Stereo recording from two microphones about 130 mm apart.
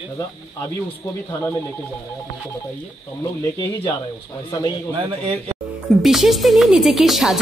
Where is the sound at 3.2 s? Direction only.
35° left (ahead or behind).